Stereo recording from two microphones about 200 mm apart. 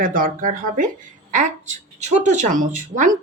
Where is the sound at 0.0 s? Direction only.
45° right (ahead or behind).